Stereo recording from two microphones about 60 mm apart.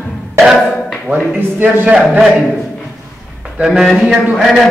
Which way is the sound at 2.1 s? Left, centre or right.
Centre.